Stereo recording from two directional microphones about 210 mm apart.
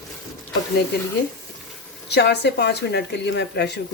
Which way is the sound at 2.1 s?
55° left (ahead or behind).